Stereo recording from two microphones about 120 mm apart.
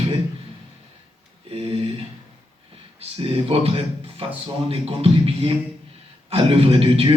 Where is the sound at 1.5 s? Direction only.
55° right (ahead or behind).